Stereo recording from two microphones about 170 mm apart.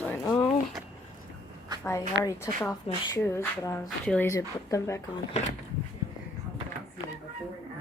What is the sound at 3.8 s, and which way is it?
Speech, 5° left (ahead or behind).